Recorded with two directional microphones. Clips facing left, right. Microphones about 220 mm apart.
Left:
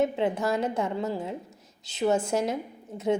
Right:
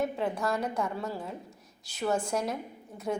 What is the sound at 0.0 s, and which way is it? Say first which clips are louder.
A woman's voice: left 5 dB; 20° left (ahead or behind).